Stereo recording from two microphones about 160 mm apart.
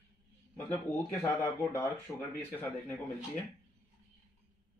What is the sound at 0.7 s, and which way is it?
Speech, 15° left (ahead or behind).